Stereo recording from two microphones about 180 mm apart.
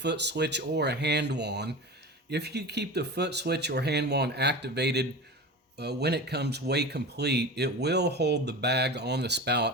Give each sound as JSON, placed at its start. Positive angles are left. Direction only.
{"t": 0.0, "sound": "speech", "side_deg": -70}